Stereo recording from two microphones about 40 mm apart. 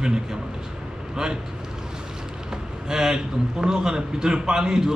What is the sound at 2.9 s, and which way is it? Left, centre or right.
A man's voice, centre.